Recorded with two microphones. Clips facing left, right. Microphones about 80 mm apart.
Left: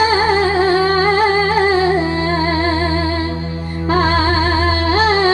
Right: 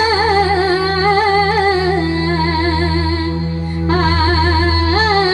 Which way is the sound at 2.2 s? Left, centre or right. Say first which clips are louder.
Even; left.